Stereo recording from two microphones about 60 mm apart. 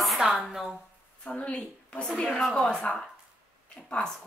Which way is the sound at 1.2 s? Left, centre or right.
Left.